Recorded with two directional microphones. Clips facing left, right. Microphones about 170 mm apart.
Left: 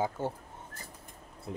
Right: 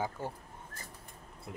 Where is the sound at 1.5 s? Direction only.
25° left (ahead or behind).